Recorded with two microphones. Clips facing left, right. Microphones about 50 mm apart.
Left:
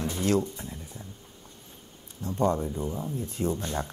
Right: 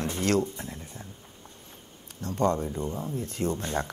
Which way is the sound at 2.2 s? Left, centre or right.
Right.